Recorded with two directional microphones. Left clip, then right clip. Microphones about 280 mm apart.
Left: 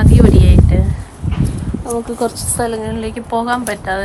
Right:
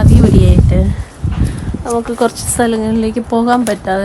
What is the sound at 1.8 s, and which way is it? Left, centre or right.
Speech, right.